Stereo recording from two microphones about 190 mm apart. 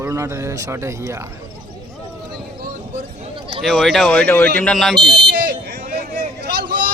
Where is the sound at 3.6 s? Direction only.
Centre (ahead or behind).